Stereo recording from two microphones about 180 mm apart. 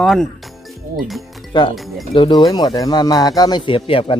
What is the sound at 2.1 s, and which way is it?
Speech, 25° left (ahead or behind).